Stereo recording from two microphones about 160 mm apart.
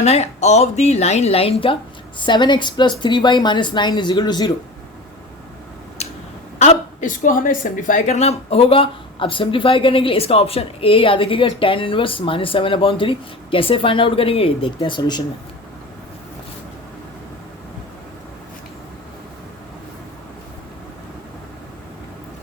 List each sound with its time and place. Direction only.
0.0 s a woman's voice: 45° left (ahead or behind); by 4.5 s 25° left (ahead or behind)
6.0 s finger snapping: 45° left (ahead or behind)
6.6 s a woman's voice: 50° left (ahead or behind); by 15.2 s 25° left (ahead or behind)